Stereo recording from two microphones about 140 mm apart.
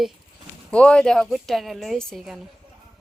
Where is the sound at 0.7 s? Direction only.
5° left (ahead or behind).